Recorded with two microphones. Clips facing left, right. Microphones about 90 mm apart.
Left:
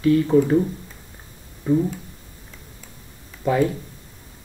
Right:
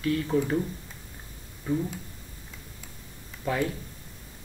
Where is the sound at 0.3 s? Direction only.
15° left (ahead or behind).